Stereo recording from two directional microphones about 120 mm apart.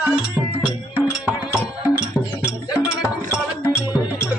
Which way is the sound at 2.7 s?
5° right (ahead or behind).